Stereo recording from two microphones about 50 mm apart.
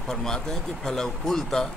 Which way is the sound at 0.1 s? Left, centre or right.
Centre.